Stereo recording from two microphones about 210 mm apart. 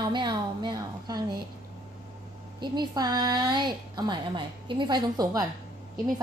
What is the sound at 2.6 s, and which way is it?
A woman's voice, 20° right (ahead or behind).